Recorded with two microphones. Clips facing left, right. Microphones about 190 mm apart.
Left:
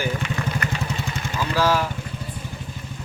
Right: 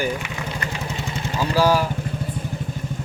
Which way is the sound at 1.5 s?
10° right (ahead or behind).